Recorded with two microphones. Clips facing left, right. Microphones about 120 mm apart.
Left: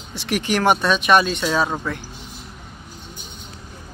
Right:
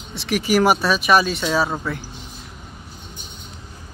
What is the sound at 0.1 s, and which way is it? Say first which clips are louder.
Speech: right 3 dB; centre (ahead or behind).